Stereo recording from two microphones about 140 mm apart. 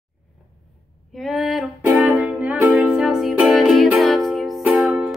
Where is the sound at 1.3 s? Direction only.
Centre (ahead or behind).